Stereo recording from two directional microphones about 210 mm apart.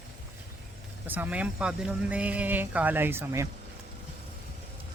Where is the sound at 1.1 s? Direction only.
5° right (ahead or behind).